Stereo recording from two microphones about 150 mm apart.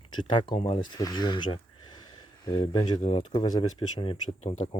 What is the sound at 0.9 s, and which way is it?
Speech, 25° left (ahead or behind).